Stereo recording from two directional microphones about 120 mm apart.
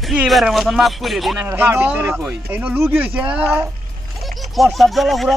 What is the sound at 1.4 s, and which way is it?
Speech, 20° right (ahead or behind).